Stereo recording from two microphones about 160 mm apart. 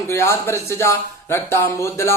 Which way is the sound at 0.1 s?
15° left (ahead or behind).